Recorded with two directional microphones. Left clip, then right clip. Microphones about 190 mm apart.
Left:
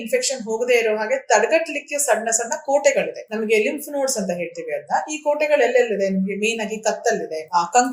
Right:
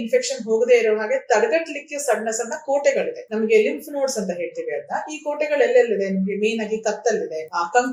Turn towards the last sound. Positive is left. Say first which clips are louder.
# left 2 dB
turn(degrees=45)  # may be behind; listen again after turning